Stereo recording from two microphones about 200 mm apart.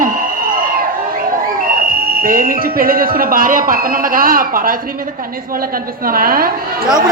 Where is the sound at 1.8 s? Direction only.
45° right (ahead or behind).